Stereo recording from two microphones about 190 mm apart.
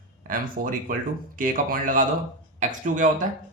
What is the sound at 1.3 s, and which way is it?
Speech, 45° right (ahead or behind).